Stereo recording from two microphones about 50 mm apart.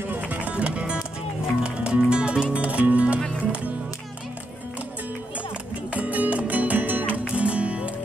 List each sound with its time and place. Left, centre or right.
0.0 s music: right
5.9 s music: right
7.2 s music: right